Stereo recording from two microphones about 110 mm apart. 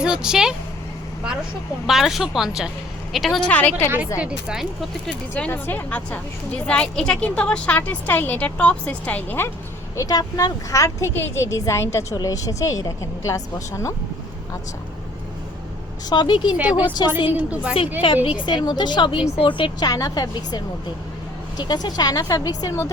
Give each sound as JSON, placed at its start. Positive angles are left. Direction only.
{"t": 0.0, "sound": "speech", "side_deg": -5}
{"t": 1.9, "sound": "speech", "side_deg": 0}
{"t": 3.5, "sound": "a woman's voice", "side_deg": 15}
{"t": 4.2, "sound": "speech", "side_deg": -10}
{"t": 5.3, "sound": "a woman's voice", "side_deg": 20}
{"t": 9.9, "sound": "a woman's voice", "side_deg": 30}
{"t": 16.0, "sound": "a woman's voice", "side_deg": 45}
{"t": 16.6, "sound": "a woman's voice", "side_deg": -15}
{"t": 18.3, "sound": "a woman's voice", "side_deg": 45}
{"t": 19.9, "sound": "a woman's voice", "side_deg": 35}
{"t": 21.6, "sound": "a woman's voice", "side_deg": 40}